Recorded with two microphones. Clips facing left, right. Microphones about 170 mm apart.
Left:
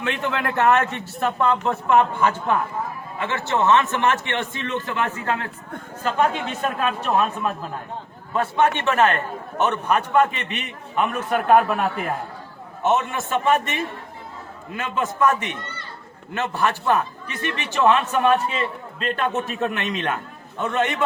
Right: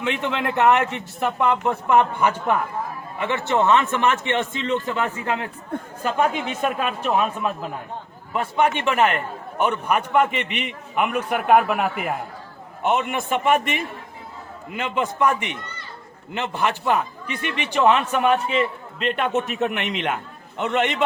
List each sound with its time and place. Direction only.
0.0 s a man's voice: 20° right (ahead or behind)